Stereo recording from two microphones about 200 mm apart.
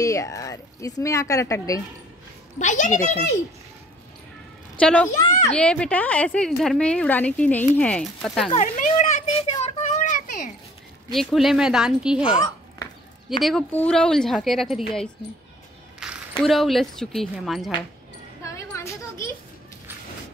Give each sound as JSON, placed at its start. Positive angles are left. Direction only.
{"t": 0.0, "sound": "speech", "side_deg": 15}
{"t": 2.6, "sound": "speech", "side_deg": 40}
{"t": 4.7, "sound": "a woman's voice", "side_deg": 5}
{"t": 8.5, "sound": "a sound", "side_deg": 40}
{"t": 11.1, "sound": "a woman's voice", "side_deg": 0}
{"t": 13.4, "sound": "a woman's voice", "side_deg": 0}
{"t": 16.0, "sound": "a sound", "side_deg": -5}
{"t": 16.4, "sound": "a woman's voice", "side_deg": 0}
{"t": 18.4, "sound": "a sound", "side_deg": 15}